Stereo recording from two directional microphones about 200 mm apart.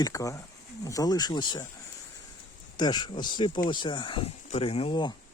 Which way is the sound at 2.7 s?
20° left (ahead or behind).